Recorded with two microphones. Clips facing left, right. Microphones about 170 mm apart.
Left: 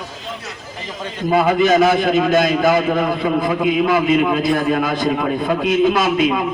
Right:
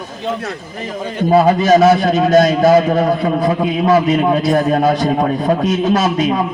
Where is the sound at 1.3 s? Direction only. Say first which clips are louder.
Right 3 dB; 35° right (ahead or behind).